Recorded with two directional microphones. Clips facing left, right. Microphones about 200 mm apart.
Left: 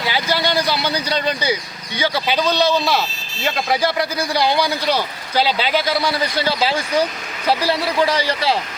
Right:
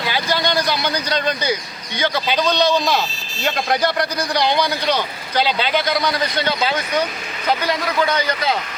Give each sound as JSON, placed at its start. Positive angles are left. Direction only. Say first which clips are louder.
{"t": 0.1, "sound": "a man's voice", "louder": "left 1 dB", "side_deg": 15}
{"t": 2.6, "sound": "a man's voice", "louder": "even", "side_deg": -15}
{"t": 3.4, "sound": "a man's voice", "louder": "even", "side_deg": 5}
{"t": 6.6, "sound": "a man's voice", "louder": "left 1 dB", "side_deg": 30}
{"t": 7.8, "sound": "a man's voice", "louder": "left 1 dB", "side_deg": 10}
{"t": 8.0, "sound": "a man's voice", "louder": "left 2 dB", "side_deg": 30}